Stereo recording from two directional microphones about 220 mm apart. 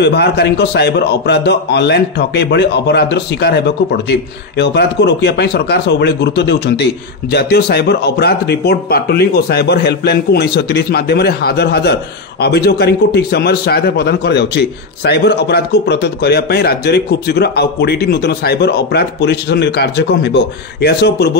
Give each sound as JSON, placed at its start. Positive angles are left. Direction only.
{"t": 0.0, "sound": "a man's voice", "side_deg": 50}